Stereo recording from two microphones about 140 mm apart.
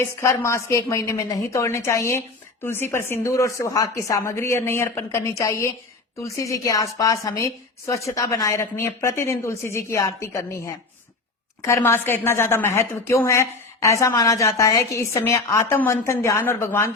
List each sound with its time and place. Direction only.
0.0 s a woman's voice: 20° left (ahead or behind)